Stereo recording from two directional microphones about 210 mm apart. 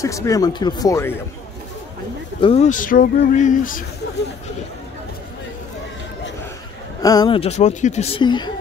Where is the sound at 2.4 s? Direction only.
30° left (ahead or behind).